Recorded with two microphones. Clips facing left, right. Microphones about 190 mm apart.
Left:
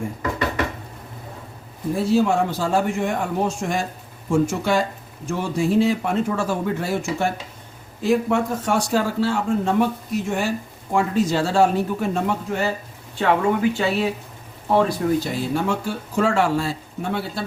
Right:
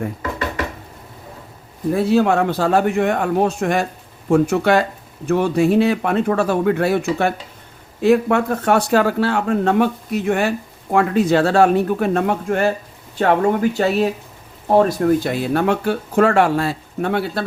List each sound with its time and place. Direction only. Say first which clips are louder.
1.9 s speech: right 3 dB; 60° right (ahead or behind)